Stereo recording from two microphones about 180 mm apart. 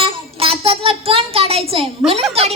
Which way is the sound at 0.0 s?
30° right (ahead or behind).